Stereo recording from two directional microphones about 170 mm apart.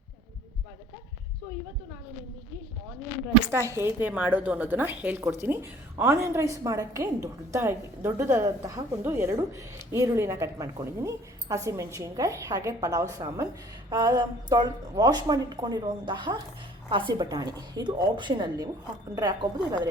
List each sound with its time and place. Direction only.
3.5 s a woman's voice: 15° right (ahead or behind)